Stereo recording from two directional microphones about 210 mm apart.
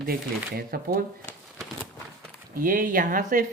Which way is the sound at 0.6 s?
45° right (ahead or behind).